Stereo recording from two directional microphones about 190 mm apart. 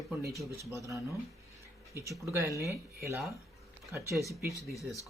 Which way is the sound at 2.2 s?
15° right (ahead or behind).